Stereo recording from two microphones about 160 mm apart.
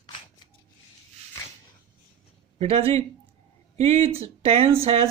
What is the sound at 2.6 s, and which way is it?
Speech, 40° right (ahead or behind).